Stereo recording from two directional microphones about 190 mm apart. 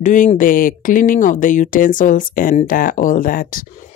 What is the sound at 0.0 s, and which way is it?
Speech, 40° left (ahead or behind).